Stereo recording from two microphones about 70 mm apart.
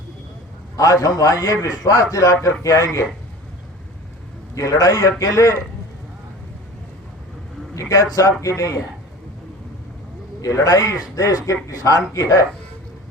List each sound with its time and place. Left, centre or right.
0.8 s a man's voice: left
4.5 s a man's voice: left
7.8 s a man's voice: left
10.4 s a man's voice: left